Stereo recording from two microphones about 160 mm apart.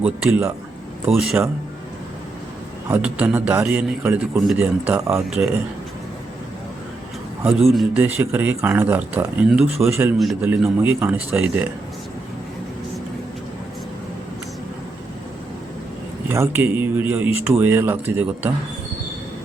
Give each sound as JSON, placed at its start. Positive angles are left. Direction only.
{"t": 0.0, "sound": "speech", "side_deg": -5}
{"t": 3.0, "sound": "speech", "side_deg": -10}
{"t": 7.4, "sound": "a man's voice", "side_deg": -5}
{"t": 8.0, "sound": "a man's voice", "side_deg": -10}
{"t": 16.3, "sound": "speech", "side_deg": -15}